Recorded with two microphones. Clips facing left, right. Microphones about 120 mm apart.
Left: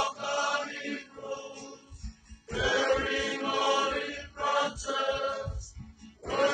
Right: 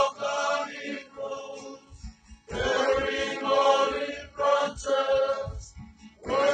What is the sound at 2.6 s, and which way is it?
Choir, 90° right.